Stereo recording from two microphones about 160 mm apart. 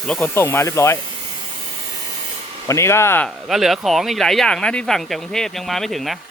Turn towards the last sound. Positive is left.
turn(degrees=0)  # may be behind; listen again after turning